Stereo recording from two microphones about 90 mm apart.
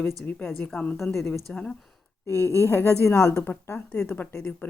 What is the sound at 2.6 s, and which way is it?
A woman's voice, 25° left (ahead or behind).